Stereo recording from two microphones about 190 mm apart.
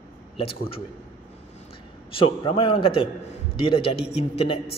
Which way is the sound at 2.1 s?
30° left (ahead or behind).